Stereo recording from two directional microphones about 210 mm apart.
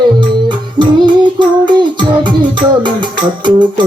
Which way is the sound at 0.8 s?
20° right (ahead or behind).